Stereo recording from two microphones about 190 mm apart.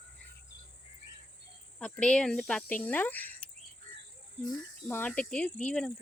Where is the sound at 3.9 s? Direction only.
40° right (ahead or behind).